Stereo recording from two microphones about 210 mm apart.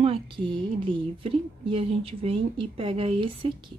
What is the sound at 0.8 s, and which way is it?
Speech, 25° right (ahead or behind).